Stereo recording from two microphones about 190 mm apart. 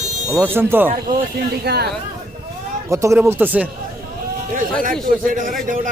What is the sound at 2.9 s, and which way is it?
Speech, 15° right (ahead or behind).